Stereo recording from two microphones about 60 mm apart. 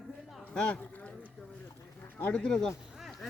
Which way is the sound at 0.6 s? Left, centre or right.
Centre.